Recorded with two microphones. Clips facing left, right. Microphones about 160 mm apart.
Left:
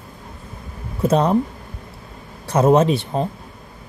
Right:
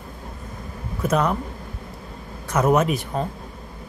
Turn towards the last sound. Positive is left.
turn(degrees=30)  # may be behind; listen again after turning